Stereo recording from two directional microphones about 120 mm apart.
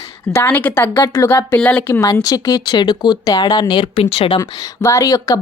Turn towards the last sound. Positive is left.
turn(degrees=30)  # may be behind; listen again after turning